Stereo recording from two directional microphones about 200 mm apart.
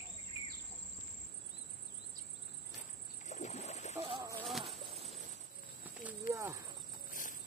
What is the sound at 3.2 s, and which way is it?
Splash, 35° left (ahead or behind).